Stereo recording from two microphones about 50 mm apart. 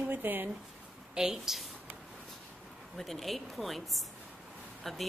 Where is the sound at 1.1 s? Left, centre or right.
Centre.